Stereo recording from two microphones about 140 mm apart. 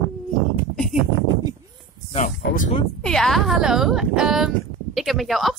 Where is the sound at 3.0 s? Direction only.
5° left (ahead or behind).